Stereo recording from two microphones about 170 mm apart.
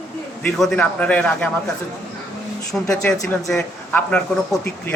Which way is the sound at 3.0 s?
5° left (ahead or behind).